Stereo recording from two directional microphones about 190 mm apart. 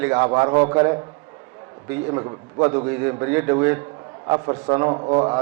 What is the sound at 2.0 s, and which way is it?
A man's voice, 25° right (ahead or behind).